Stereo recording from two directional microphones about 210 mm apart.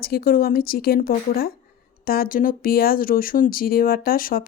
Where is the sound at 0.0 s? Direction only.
45° left (ahead or behind).